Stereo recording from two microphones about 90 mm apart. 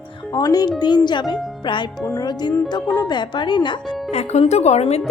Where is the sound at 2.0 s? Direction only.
30° left (ahead or behind).